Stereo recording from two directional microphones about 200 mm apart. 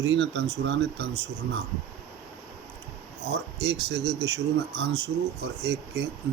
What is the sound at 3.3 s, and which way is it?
Speech, 55° right (ahead or behind).